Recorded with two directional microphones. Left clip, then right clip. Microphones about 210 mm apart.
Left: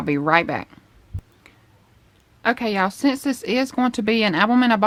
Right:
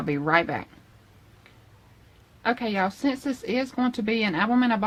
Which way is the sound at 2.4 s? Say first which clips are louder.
Left 5 dB; 45° left (ahead or behind).